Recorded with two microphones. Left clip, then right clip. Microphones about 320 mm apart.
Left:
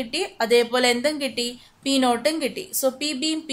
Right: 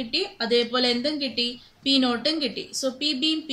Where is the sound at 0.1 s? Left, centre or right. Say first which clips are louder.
Left 3 dB; centre.